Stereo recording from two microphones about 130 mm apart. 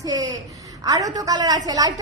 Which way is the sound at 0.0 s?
30° right (ahead or behind).